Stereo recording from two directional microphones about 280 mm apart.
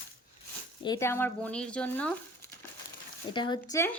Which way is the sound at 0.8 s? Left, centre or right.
Centre.